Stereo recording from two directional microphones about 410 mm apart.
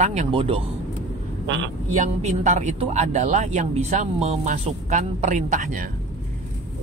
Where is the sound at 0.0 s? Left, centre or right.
Centre.